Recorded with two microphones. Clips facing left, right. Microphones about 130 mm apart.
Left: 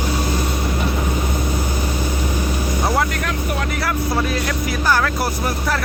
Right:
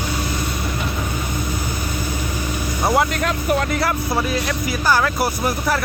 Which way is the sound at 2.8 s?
15° right (ahead or behind).